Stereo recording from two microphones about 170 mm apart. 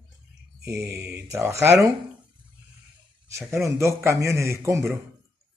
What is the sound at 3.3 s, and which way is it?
A man's voice, 15° right (ahead or behind).